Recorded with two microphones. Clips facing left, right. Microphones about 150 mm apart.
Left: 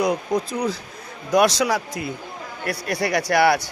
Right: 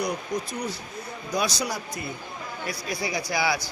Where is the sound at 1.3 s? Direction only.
90° left.